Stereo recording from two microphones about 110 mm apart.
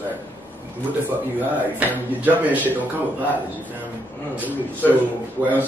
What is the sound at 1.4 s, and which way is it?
Speech, 15° right (ahead or behind).